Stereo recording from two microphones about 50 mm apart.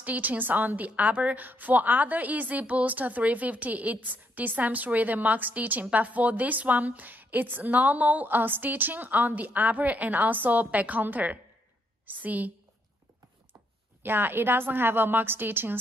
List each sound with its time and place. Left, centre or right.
0.0 s a woman's voice: right
14.0 s a woman's voice: right